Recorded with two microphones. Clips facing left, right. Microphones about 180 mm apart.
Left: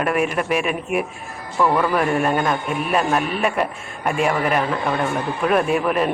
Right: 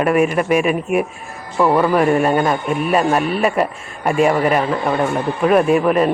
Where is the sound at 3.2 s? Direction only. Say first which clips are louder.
Right 4 dB; 35° right (ahead or behind).